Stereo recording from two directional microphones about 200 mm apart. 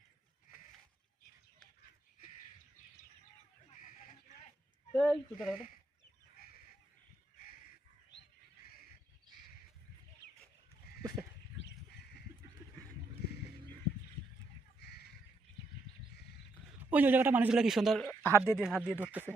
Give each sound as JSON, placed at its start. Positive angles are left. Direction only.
{"t": 3.7, "sound": "a sound", "side_deg": 40}
{"t": 4.9, "sound": "a man's voice", "side_deg": 0}
{"t": 8.6, "sound": "fowl", "side_deg": 50}
{"t": 13.2, "sound": "music", "side_deg": 55}
{"t": 14.8, "sound": "crow", "side_deg": 55}
{"t": 16.9, "sound": "a man's voice", "side_deg": -10}
{"t": 18.5, "sound": "a man's voice", "side_deg": -5}